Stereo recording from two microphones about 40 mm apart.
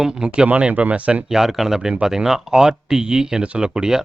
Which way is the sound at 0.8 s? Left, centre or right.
Right.